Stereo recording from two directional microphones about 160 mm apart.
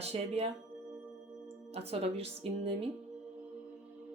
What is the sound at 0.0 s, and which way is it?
Speech, 40° right (ahead or behind).